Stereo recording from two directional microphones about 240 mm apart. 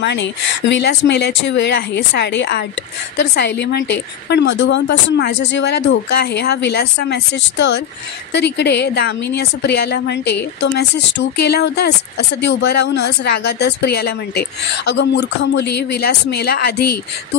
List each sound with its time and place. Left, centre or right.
0.0 s a woman's voice: left